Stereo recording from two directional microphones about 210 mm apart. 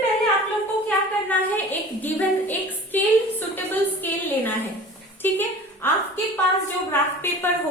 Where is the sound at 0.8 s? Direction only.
10° left (ahead or behind).